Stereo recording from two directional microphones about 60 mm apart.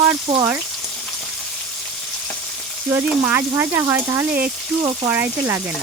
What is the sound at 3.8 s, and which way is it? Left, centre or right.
Frying, right.